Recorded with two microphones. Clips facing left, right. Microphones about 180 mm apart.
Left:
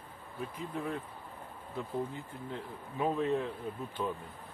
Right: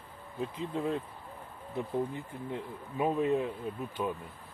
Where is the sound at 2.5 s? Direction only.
15° right (ahead or behind).